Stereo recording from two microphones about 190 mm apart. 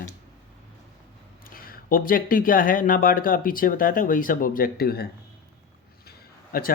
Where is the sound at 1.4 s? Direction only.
50° left (ahead or behind).